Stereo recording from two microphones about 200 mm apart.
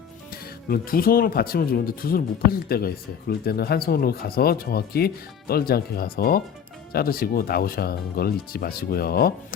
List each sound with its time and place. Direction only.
0.3 s speech: 45° left (ahead or behind)